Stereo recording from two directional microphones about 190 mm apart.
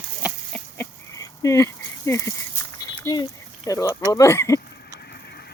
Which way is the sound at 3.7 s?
15° left (ahead or behind).